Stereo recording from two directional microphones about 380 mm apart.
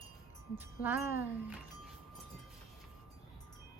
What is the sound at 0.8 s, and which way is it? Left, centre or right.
Wind chime, centre.